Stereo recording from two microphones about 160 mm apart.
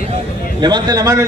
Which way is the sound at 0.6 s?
25° right (ahead or behind).